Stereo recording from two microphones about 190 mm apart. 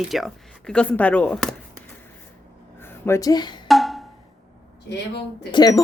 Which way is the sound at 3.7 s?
Centre (ahead or behind).